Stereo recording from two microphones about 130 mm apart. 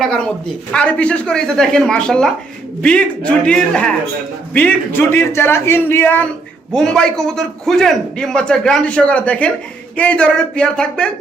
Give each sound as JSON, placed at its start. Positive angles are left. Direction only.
{"t": 0.7, "sound": "a man's voice", "side_deg": 10}
{"t": 6.7, "sound": "a man's voice", "side_deg": 5}